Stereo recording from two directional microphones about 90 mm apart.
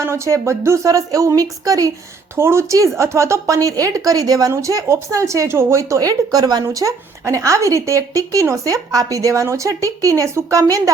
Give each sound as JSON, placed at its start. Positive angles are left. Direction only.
{"t": 0.0, "sound": "a woman's voice", "side_deg": -30}
{"t": 2.3, "sound": "a woman's voice", "side_deg": -30}